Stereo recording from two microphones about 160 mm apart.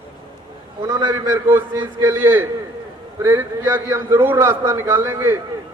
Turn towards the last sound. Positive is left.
turn(degrees=-15)  # may be behind; listen again after turning